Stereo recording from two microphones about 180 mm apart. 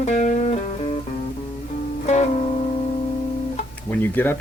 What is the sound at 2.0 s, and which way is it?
Music, 40° left (ahead or behind).